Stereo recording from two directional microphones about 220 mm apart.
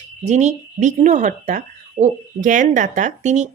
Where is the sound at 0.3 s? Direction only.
30° right (ahead or behind).